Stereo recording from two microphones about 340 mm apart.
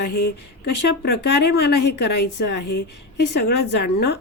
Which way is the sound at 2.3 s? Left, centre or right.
Left.